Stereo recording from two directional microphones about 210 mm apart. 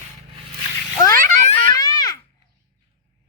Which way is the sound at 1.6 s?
15° left (ahead or behind).